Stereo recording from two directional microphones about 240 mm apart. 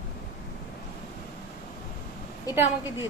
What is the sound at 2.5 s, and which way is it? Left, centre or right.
Speech, centre.